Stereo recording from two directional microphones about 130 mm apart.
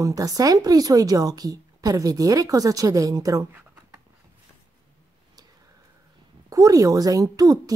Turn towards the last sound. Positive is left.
turn(degrees=-30)  # may be behind; listen again after turning